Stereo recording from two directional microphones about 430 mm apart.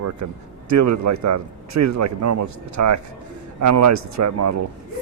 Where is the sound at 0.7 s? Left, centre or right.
Right.